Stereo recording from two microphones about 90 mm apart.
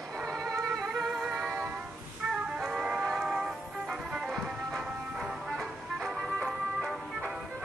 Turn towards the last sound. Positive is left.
turn(degrees=0)  # may be behind; listen again after turning